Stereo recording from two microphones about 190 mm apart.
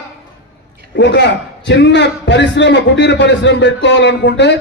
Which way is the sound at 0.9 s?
65° left (ahead or behind).